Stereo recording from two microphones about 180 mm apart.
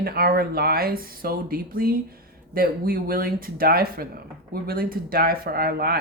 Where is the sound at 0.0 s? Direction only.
60° right (ahead or behind).